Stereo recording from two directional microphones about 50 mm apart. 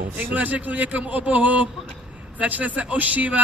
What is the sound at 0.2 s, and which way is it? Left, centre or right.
A man's voice, right.